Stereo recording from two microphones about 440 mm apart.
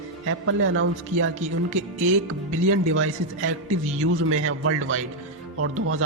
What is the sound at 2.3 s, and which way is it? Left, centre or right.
Speech, right.